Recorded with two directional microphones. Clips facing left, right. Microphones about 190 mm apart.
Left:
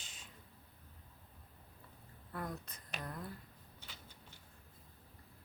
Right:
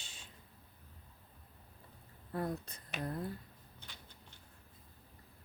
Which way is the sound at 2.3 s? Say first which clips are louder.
Right 6 dB; 30° right (ahead or behind).